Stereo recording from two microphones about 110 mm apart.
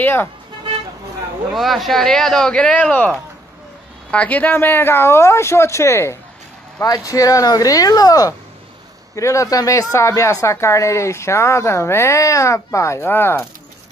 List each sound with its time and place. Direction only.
0.0 s speech: 20° left (ahead or behind)
1.5 s speech: centre (ahead or behind); by 13.5 s 20° left (ahead or behind)